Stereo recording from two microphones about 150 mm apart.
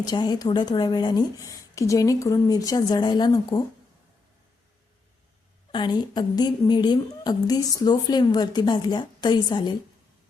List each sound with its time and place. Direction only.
0.1 s a woman's voice: 30° left (ahead or behind)
5.7 s a woman's voice: 30° left (ahead or behind)